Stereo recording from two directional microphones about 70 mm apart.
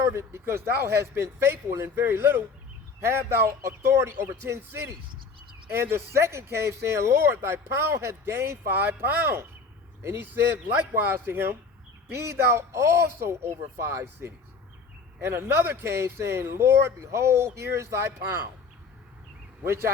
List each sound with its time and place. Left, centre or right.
0.1 s speech: right
19.6 s speech: right